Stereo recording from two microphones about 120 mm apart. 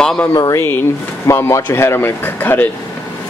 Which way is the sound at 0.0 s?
5° left (ahead or behind).